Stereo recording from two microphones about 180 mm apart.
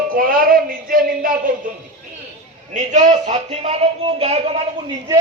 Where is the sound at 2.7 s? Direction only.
40° right (ahead or behind).